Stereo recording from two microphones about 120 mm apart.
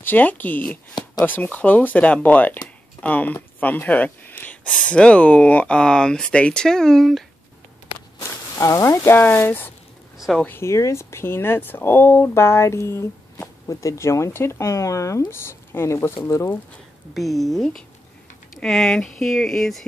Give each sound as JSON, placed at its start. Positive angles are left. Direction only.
{"t": 0.0, "sound": "speech", "side_deg": 15}
{"t": 8.2, "sound": "walk", "side_deg": 25}
{"t": 8.8, "sound": "speech", "side_deg": 20}
{"t": 10.1, "sound": "a sound", "side_deg": 0}
{"t": 10.4, "sound": "speech", "side_deg": 20}
{"t": 17.1, "sound": "speech", "side_deg": 0}